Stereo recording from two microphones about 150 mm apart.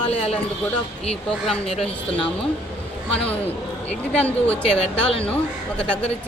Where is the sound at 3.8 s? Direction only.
10° left (ahead or behind).